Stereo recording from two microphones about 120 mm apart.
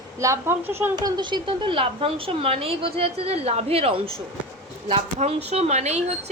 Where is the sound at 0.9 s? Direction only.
40° right (ahead or behind).